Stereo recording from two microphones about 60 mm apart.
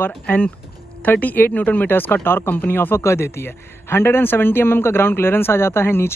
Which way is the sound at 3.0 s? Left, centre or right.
Left.